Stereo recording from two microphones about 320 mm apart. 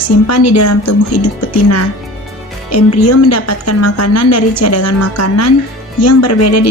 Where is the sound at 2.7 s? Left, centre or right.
Left.